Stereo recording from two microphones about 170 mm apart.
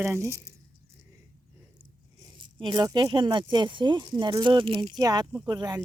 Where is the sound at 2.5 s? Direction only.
25° right (ahead or behind).